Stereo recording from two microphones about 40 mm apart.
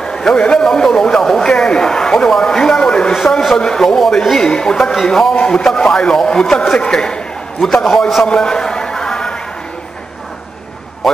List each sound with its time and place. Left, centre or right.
0.0 s a man's voice: centre
3.5 s speech: centre
7.6 s a man's voice: centre
8.4 s a sound: centre